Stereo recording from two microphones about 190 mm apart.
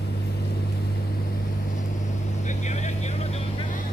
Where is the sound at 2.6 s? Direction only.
40° left (ahead or behind).